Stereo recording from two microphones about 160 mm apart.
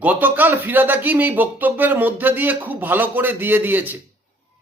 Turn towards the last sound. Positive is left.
turn(degrees=-10)  # may be behind; listen again after turning